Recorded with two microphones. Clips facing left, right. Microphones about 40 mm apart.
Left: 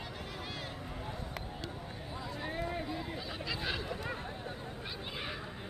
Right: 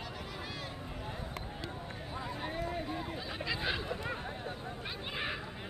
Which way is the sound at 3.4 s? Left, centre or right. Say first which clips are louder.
Right 3 dB; centre.